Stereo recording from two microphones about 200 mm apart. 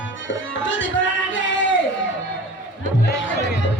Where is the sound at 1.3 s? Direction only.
70° left (ahead or behind).